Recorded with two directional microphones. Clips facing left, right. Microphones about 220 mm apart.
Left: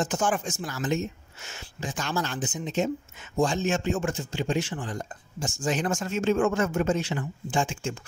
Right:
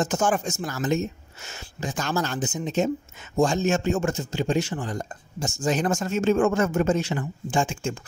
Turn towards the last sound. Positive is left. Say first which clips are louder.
# right 3 dB
turn(degrees=-45)  # may be behind; listen again after turning